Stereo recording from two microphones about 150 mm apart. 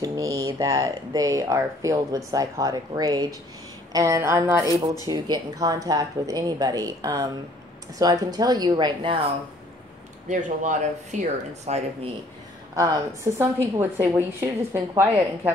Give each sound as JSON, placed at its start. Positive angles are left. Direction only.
{"t": 0.0, "sound": "speech", "side_deg": -25}
{"t": 10.2, "sound": "speech", "side_deg": -55}
{"t": 12.7, "sound": "a woman's voice", "side_deg": -20}